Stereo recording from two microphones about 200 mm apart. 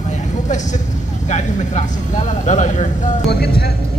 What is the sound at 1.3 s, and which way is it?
Speech, 35° left (ahead or behind).